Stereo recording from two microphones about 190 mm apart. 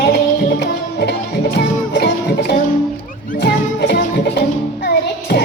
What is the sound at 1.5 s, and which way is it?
Music, 55° left (ahead or behind).